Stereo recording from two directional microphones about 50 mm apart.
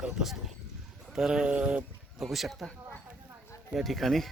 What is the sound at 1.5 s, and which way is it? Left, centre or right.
Speech, right.